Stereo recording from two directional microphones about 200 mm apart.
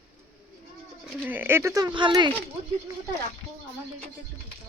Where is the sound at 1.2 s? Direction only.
10° right (ahead or behind).